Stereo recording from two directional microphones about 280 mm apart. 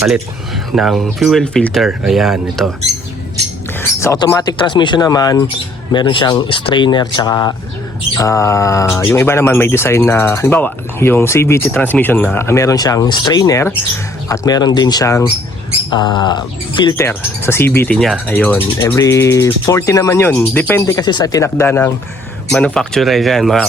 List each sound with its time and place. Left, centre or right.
0.7 s speech: centre
3.8 s speech: centre